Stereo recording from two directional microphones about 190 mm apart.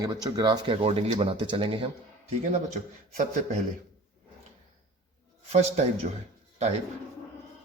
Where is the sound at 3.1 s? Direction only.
45° right (ahead or behind).